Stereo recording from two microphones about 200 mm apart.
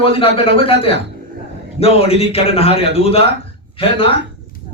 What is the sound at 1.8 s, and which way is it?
Speech, 30° left (ahead or behind).